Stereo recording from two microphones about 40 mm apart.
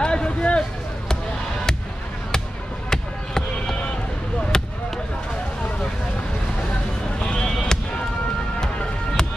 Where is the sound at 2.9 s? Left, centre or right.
Centre.